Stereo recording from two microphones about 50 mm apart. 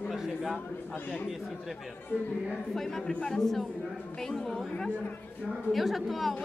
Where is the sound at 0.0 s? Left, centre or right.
Centre.